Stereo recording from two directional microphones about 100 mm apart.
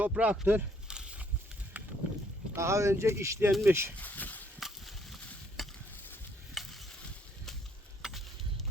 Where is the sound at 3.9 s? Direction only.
15° left (ahead or behind).